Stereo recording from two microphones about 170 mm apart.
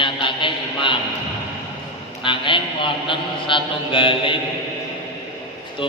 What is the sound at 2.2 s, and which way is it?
A man's voice, 30° left (ahead or behind).